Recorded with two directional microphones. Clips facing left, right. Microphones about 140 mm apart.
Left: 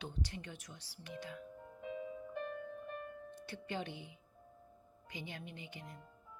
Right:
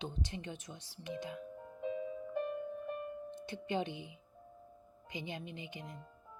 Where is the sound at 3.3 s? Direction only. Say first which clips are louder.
Right 6 dB; 20° right (ahead or behind).